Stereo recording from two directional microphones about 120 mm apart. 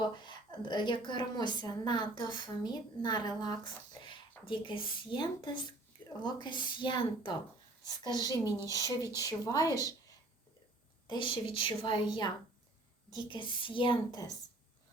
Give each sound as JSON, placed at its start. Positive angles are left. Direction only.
{"t": 0.0, "sound": "a woman's voice", "side_deg": 40}
{"t": 11.1, "sound": "a woman's voice", "side_deg": 45}
{"t": 13.3, "sound": "a woman's voice", "side_deg": 45}
{"t": 14.1, "sound": "a woman's voice", "side_deg": 30}